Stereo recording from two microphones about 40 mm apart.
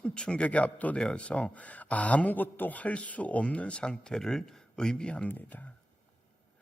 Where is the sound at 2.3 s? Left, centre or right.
Left; by 5.1 s centre.